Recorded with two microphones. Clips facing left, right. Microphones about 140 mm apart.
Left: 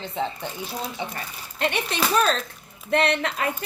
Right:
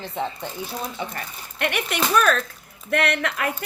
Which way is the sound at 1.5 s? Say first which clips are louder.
Even; 25° left (ahead or behind).